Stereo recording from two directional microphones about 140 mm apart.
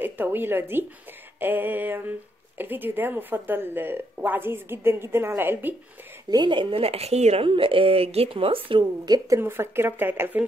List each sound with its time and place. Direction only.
0.0 s speech: 15° right (ahead or behind)
6.3 s speech: 35° right (ahead or behind); by 7.4 s 50° right (ahead or behind)
7.4 s speech: 40° right (ahead or behind)
9.4 s speech: 15° right (ahead or behind)